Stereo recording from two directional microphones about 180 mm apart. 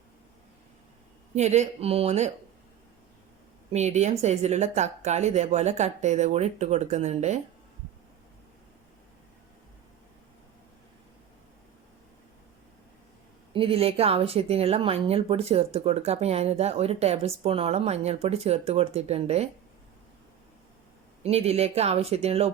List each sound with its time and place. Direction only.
1.4 s speech: 40° right (ahead or behind)
3.7 s speech: 40° right (ahead or behind)
13.5 s speech: 30° right (ahead or behind)
21.2 s speech: 35° right (ahead or behind)